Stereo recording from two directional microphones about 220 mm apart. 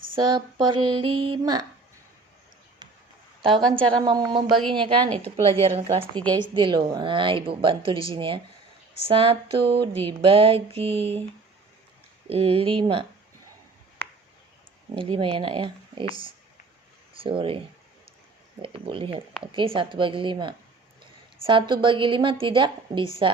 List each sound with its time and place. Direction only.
0.2 s a woman's voice: 20° right (ahead or behind)
3.7 s a woman's voice: 20° right (ahead or behind)
12.3 s a woman's voice: 25° right (ahead or behind)
14.9 s a woman's voice: 25° right (ahead or behind)
18.6 s a woman's voice: 25° right (ahead or behind)